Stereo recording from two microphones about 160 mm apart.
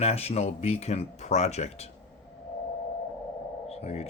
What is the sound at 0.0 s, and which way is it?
Speech, 40° left (ahead or behind).